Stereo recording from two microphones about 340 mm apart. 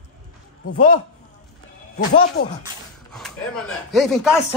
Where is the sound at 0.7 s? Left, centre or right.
Left.